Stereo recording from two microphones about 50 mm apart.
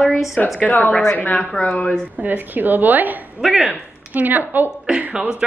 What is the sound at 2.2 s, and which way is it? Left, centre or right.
Speech, right.